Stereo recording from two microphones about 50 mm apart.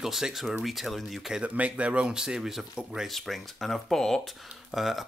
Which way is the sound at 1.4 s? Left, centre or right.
Right.